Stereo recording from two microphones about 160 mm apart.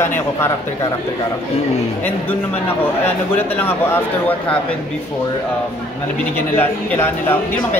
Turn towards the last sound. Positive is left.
turn(degrees=15)  # may be behind; listen again after turning